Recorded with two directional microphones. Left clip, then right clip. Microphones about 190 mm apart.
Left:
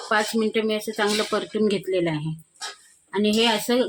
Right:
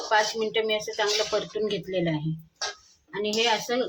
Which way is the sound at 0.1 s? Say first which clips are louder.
Left 2 dB; 55° left (ahead or behind).